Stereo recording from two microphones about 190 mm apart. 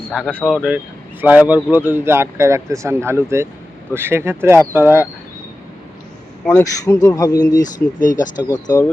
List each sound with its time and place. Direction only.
0.1 s speech: 5° right (ahead or behind)
6.6 s speech: 20° left (ahead or behind)
7.9 s speech: 45° left (ahead or behind)
8.4 s speech: 20° left (ahead or behind)